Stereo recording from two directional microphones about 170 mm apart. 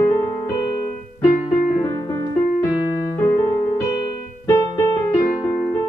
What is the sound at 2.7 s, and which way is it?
Keyboard, 15° left (ahead or behind).